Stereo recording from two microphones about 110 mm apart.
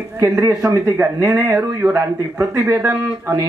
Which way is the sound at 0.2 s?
30° right (ahead or behind).